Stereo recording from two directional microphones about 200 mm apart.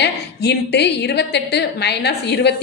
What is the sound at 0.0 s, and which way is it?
A woman's voice, 55° left (ahead or behind).